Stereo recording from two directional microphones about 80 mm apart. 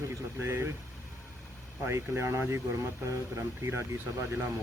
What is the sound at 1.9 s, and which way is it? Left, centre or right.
Speech, right.